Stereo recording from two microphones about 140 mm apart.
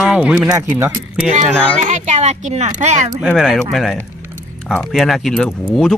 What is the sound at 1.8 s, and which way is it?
Speech, 55° right (ahead or behind).